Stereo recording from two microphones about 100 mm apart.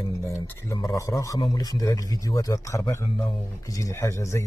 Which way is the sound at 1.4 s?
40° left (ahead or behind).